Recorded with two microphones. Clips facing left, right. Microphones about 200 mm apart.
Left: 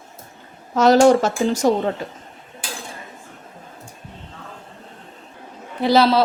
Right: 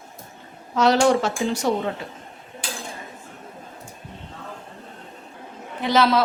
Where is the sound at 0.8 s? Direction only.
45° left (ahead or behind).